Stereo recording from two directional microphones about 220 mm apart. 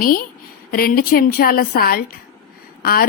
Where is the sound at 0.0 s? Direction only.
40° left (ahead or behind).